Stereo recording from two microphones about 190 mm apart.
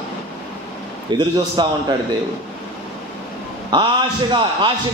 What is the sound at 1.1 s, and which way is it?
Speech, 20° right (ahead or behind).